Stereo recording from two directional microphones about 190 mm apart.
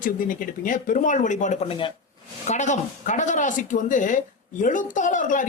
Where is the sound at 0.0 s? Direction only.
45° left (ahead or behind).